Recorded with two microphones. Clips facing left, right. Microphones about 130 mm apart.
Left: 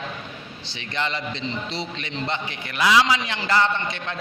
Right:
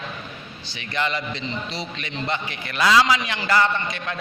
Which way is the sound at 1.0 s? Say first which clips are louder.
Right 2 dB; 25° left (ahead or behind).